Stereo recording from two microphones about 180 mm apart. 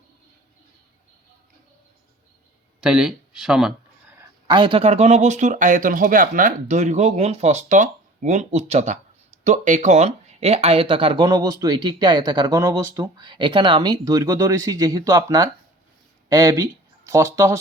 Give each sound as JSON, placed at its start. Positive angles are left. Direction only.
{"t": 2.8, "sound": "speech", "side_deg": -5}
{"t": 4.4, "sound": "speech", "side_deg": -25}